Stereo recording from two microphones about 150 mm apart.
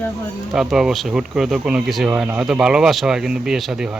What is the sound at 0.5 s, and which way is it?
Speech, 5° right (ahead or behind).